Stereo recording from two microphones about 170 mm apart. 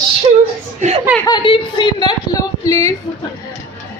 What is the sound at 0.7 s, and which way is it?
Speech, 40° right (ahead or behind).